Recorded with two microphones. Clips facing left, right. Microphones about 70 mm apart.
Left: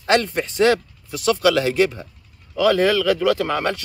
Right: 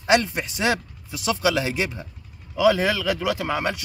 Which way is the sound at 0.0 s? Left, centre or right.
Centre.